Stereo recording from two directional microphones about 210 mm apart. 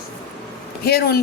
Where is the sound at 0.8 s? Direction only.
50° left (ahead or behind).